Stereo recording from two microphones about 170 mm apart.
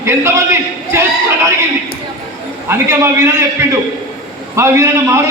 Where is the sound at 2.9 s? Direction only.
15° right (ahead or behind).